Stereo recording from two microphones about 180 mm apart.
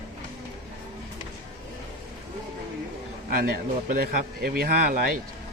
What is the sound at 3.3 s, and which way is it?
Speech, 55° right (ahead or behind).